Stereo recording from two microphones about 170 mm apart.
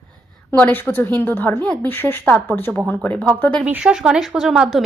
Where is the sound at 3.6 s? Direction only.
5° right (ahead or behind).